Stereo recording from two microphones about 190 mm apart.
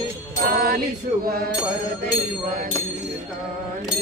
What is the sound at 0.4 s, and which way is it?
Music, 50° right (ahead or behind).